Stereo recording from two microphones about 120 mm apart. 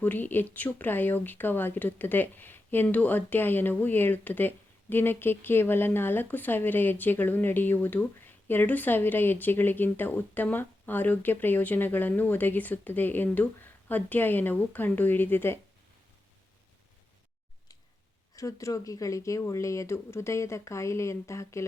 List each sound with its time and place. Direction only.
0.0 s speech: 15° left (ahead or behind)
18.3 s speech: 30° left (ahead or behind)